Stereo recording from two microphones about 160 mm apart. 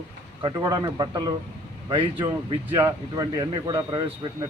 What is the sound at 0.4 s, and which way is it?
A man's voice, 25° right (ahead or behind).